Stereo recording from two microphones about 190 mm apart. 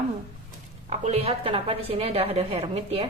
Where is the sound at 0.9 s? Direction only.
35° right (ahead or behind).